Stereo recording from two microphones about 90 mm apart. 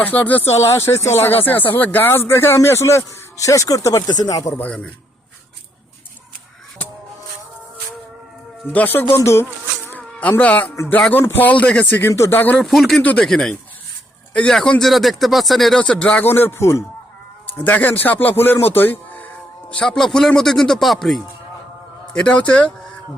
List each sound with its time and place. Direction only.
0.0 s speech: 20° left (ahead or behind)
0.6 s speech: 30° left (ahead or behind); by 4.5 s 45° left (ahead or behind)
4.5 s speech: 15° left (ahead or behind)
8.7 s speech: 20° left (ahead or behind)
10.2 s speech: 15° left (ahead or behind)
12.5 s a man's voice: centre (ahead or behind)
13.0 s speech: 15° left (ahead or behind)
13.2 s a man's voice: 5° left (ahead or behind)
15.8 s speech: 15° left (ahead or behind); by 16.8 s 30° left (ahead or behind)
17.7 s speech: 20° left (ahead or behind)
19.7 s a man's voice: 5° left (ahead or behind)
22.1 s speech: 15° left (ahead or behind)